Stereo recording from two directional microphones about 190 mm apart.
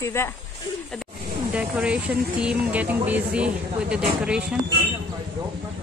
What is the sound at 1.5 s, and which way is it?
Speech, 5° right (ahead or behind).